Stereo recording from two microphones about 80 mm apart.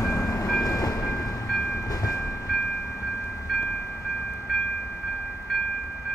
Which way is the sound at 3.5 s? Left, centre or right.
Centre.